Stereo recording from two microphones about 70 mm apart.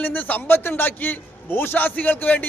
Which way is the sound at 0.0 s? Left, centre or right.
Left.